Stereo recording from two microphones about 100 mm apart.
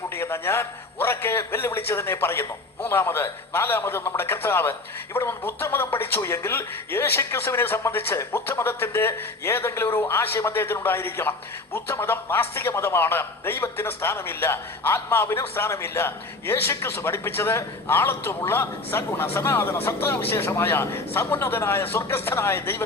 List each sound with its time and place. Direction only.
0.2 s a man's voice: 25° left (ahead or behind)